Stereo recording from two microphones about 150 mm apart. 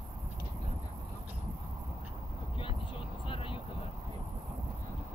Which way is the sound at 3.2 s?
35° left (ahead or behind).